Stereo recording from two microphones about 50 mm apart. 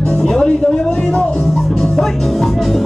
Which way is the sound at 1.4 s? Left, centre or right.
Centre.